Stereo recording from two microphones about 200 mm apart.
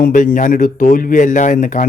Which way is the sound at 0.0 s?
45° left (ahead or behind).